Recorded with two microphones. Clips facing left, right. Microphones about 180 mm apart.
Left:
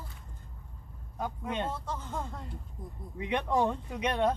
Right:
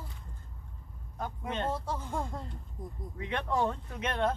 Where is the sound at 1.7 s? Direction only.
10° right (ahead or behind).